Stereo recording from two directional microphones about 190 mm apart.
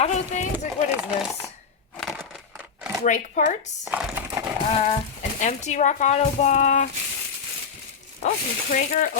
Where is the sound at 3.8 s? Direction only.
10° right (ahead or behind).